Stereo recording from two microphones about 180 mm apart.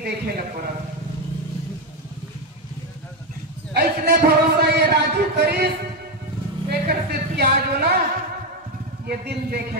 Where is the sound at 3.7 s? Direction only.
60° right (ahead or behind).